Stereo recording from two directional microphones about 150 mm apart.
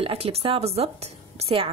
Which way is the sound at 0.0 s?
40° right (ahead or behind).